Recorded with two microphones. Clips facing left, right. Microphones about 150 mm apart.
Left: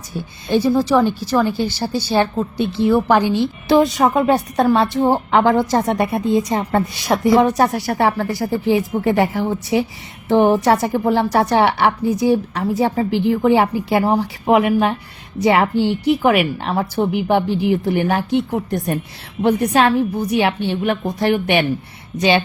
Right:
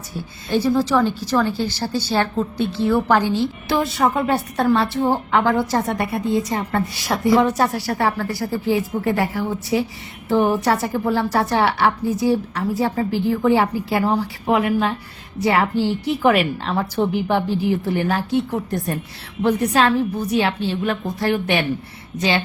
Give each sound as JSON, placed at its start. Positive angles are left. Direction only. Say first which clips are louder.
{"t": 0.5, "sound": "a woman's voice", "louder": "left 3 dB", "side_deg": 10}